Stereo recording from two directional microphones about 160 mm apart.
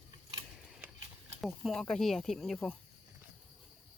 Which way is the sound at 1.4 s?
Centre (ahead or behind).